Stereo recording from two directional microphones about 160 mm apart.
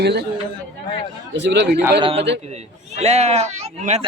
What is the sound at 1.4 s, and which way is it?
Speech, 90° right.